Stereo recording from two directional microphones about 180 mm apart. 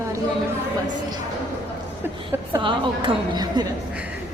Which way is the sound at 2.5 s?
25° right (ahead or behind).